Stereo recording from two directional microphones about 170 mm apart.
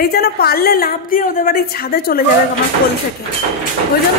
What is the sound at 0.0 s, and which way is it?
A woman's voice, 65° left (ahead or behind).